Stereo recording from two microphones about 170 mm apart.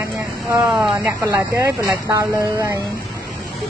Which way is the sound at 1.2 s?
15° right (ahead or behind).